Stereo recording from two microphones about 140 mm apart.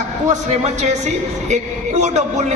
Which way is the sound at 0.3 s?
55° right (ahead or behind).